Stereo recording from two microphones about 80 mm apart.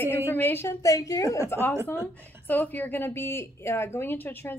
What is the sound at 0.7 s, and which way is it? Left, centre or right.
Speech, left.